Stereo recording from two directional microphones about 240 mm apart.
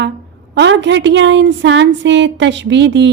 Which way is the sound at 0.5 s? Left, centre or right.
Right.